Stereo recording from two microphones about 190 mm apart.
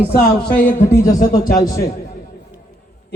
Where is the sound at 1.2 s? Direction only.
50° left (ahead or behind).